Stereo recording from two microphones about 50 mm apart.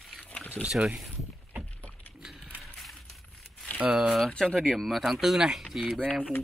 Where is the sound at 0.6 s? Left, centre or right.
Right.